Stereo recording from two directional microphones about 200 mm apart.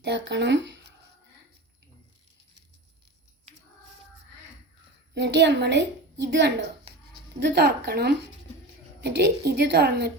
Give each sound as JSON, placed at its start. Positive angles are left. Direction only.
{"t": 0.0, "sound": "speech", "side_deg": -60}
{"t": 5.1, "sound": "a woman's voice", "side_deg": -60}